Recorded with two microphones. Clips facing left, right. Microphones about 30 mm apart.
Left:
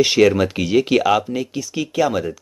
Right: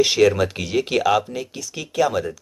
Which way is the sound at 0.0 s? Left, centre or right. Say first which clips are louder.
Left 2 dB; centre.